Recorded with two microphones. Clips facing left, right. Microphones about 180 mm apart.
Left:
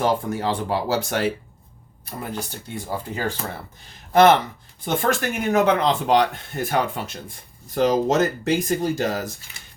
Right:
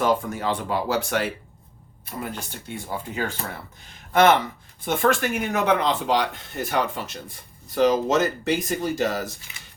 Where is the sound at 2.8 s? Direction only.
40° left (ahead or behind).